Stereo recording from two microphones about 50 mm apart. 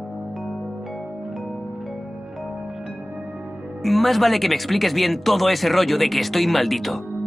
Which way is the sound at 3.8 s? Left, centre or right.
Centre.